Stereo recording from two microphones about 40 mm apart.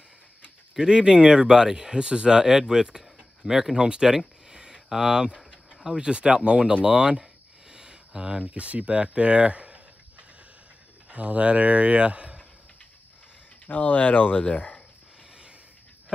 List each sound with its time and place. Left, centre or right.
0.7 s speech: centre
4.5 s a sound: centre
5.9 s speech: right
7.7 s a sound: centre
8.5 s speech: right
11.1 s speech: right
13.7 s speech: left